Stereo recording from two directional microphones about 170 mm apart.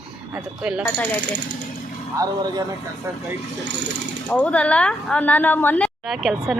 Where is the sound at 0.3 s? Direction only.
5° right (ahead or behind).